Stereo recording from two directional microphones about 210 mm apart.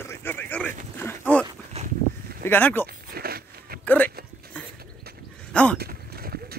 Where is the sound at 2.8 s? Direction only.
45° right (ahead or behind).